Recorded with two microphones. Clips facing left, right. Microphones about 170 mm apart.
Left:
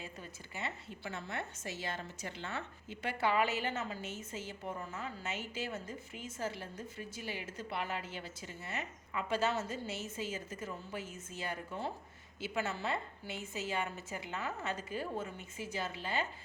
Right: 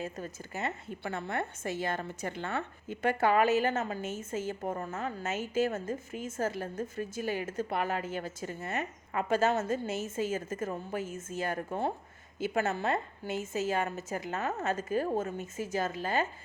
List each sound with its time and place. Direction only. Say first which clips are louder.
0.0 s a woman's voice: right 9 dB; 45° right (ahead or behind)